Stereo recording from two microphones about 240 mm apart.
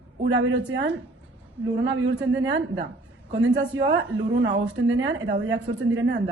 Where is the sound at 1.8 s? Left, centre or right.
Right.